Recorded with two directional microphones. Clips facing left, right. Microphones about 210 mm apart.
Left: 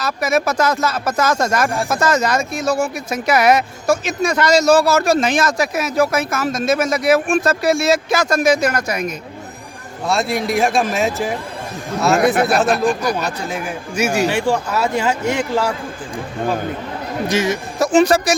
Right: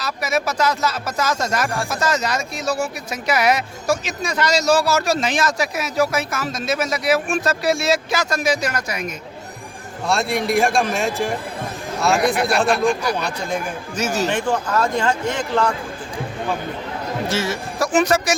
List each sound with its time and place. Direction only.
0.0 s speech: 50° left (ahead or behind)
10.1 s speech: centre (ahead or behind)
12.2 s speech: 50° left (ahead or behind)
12.5 s speech: centre (ahead or behind)
17.2 s speech: 15° left (ahead or behind); by 18.3 s 30° left (ahead or behind)